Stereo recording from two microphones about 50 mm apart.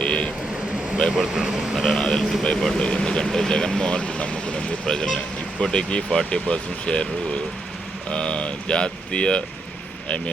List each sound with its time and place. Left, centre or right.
0.0 s vehicle: centre
1.1 s speech: centre
2.0 s speech: centre
4.9 s speech: centre